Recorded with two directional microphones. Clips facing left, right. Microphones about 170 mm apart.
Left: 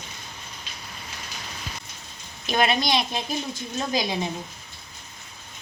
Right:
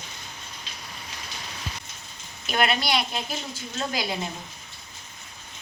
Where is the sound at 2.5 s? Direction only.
20° left (ahead or behind).